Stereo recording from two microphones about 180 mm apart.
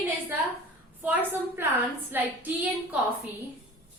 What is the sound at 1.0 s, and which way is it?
A woman's voice, 10° right (ahead or behind).